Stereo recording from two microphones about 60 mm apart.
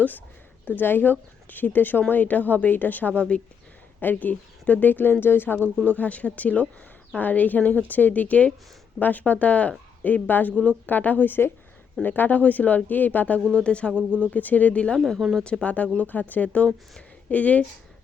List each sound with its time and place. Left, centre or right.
0.6 s speech: left
6.0 s speech: left
13.9 s speech: right
14.3 s speech: left
14.9 s speech: centre
15.6 s speech: left